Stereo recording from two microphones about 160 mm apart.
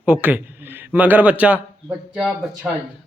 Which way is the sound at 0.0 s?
10° right (ahead or behind).